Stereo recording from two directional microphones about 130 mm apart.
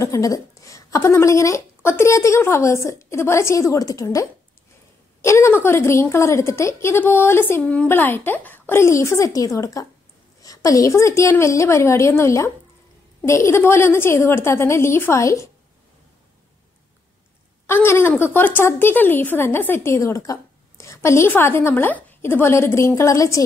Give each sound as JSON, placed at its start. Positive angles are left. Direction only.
{"t": 0.0, "sound": "a woman's voice", "side_deg": 25}
{"t": 17.6, "sound": "a woman's voice", "side_deg": 20}